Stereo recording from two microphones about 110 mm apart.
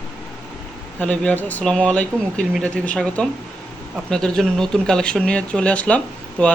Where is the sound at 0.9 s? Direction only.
10° left (ahead or behind).